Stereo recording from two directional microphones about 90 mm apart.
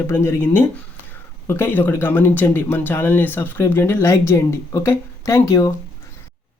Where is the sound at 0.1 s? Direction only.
30° left (ahead or behind).